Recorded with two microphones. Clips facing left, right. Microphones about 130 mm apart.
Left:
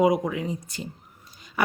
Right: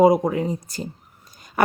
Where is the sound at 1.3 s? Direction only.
45° right (ahead or behind).